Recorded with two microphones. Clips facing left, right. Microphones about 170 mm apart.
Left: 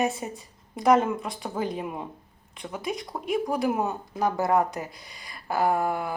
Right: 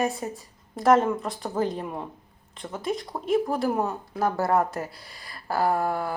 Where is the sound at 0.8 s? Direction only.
Centre (ahead or behind).